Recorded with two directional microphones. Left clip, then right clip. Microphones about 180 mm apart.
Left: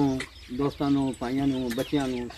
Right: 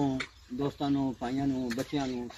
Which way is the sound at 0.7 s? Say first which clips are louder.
Left 4 dB; 25° right (ahead or behind).